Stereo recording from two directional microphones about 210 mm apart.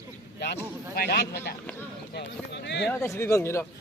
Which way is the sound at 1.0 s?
50° left (ahead or behind).